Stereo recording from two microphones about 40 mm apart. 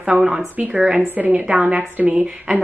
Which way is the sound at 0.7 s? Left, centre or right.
Right.